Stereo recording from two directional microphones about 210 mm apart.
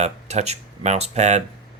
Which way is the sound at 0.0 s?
30° right (ahead or behind).